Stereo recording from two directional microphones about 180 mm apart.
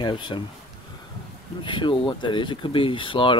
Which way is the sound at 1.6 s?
25° left (ahead or behind).